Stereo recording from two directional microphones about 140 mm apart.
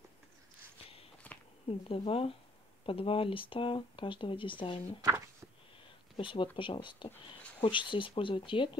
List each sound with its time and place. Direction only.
1.3 s a sound: 10° left (ahead or behind)
1.7 s speech: 40° left (ahead or behind)
6.1 s speech: 40° left (ahead or behind)